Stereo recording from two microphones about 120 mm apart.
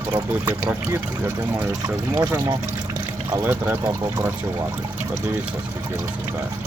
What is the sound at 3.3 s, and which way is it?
Speech, 15° right (ahead or behind).